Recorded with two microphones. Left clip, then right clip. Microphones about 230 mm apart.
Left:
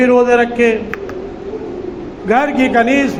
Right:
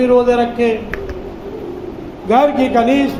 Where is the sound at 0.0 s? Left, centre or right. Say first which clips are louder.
Left 2 dB; left.